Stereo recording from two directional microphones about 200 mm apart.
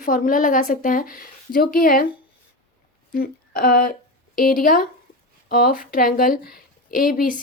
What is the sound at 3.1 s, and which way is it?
A woman's voice, 45° left (ahead or behind).